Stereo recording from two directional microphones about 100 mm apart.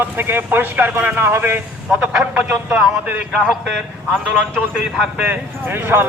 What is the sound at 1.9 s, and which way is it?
A man's voice, 5° right (ahead or behind).